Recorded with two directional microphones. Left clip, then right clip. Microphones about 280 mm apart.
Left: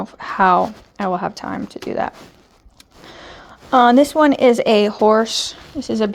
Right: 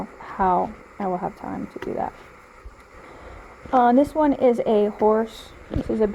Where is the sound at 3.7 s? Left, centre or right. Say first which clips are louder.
Left 6 dB; left.